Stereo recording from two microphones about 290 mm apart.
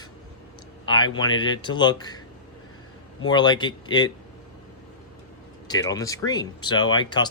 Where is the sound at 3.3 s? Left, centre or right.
Centre.